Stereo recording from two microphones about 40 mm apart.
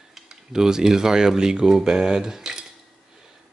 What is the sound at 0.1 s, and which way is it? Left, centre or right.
Speech, centre.